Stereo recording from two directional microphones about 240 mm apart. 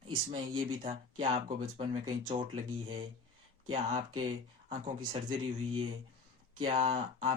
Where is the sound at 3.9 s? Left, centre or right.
Centre.